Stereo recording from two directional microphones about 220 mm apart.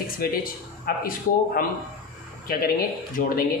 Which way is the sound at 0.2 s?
45° left (ahead or behind).